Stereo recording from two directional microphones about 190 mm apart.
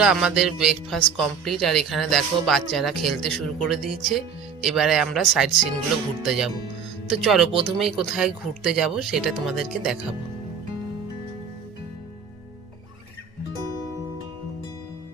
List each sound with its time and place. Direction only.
0.0 s speech: 5° right (ahead or behind)
13.5 s music: 20° right (ahead or behind)